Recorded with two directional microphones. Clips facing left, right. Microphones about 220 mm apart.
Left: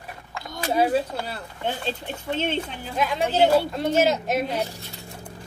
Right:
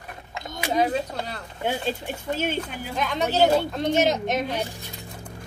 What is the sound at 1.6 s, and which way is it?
Speech, 10° right (ahead or behind).